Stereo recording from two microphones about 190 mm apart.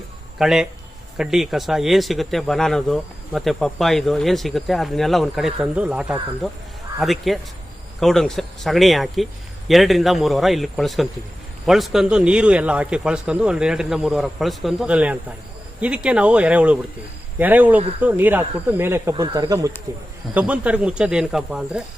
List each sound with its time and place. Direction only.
0.3 s speech: centre (ahead or behind); by 19.7 s 20° right (ahead or behind)
20.3 s speech: 5° right (ahead or behind)